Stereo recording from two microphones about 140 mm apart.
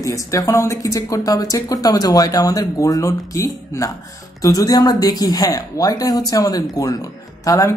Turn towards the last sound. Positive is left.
turn(degrees=25)  # may be behind; listen again after turning